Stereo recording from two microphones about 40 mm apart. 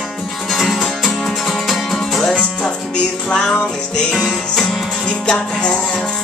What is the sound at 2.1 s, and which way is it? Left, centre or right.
Music, centre.